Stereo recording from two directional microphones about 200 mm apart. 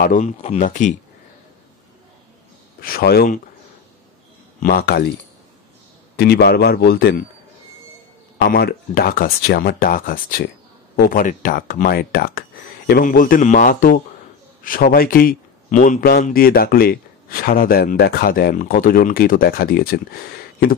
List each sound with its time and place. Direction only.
0.0 s speech: 40° left (ahead or behind)
2.8 s a man's voice: 50° left (ahead or behind)
4.6 s a man's voice: 45° left (ahead or behind)
6.1 s a man's voice: 55° left (ahead or behind)
8.5 s a man's voice: 50° left (ahead or behind)